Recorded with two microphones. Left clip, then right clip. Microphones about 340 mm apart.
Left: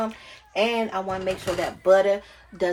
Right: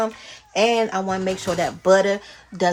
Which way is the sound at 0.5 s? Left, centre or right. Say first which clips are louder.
Right 5 dB; right.